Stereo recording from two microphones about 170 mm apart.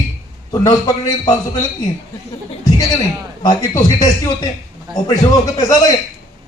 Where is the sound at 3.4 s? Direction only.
25° left (ahead or behind).